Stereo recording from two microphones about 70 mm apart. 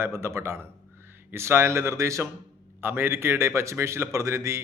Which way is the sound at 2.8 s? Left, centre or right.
Right.